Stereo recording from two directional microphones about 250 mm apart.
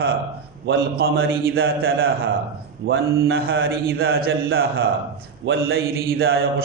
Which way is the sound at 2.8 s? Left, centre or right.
Right.